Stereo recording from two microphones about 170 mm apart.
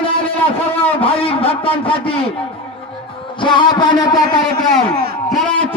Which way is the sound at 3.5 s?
25° left (ahead or behind).